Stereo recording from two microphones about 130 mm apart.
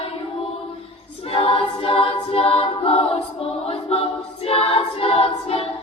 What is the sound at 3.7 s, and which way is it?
Music, 50° left (ahead or behind).